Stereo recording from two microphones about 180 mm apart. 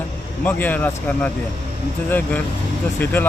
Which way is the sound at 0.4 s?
10° left (ahead or behind).